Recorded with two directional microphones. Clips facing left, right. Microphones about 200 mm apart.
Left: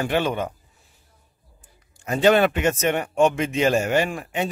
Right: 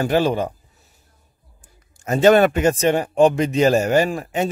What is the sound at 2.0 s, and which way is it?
Speech, 45° right (ahead or behind).